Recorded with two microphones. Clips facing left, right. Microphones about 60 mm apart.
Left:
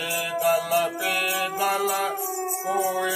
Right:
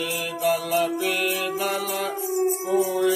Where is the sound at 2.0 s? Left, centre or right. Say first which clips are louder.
Right 3 dB; centre.